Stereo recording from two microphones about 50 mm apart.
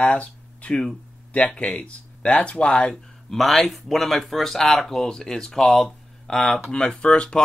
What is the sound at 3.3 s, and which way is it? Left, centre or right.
Speech, centre.